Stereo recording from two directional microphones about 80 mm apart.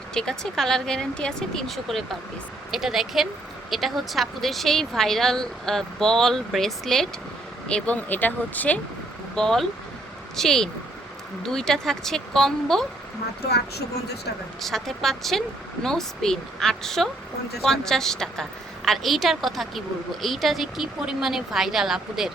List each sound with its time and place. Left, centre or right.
0.1 s speech: centre
9.3 s speech: centre
14.6 s speech: centre